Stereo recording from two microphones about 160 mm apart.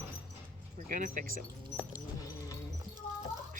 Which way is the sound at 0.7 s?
55° right (ahead or behind).